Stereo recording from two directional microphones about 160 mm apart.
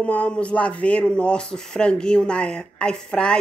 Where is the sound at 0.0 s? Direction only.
10° left (ahead or behind).